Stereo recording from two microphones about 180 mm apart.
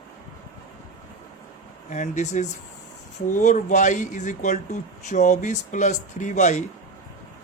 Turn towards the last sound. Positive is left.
turn(degrees=40)  # may be behind; listen again after turning